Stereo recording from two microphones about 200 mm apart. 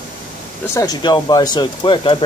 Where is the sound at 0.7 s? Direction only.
20° left (ahead or behind).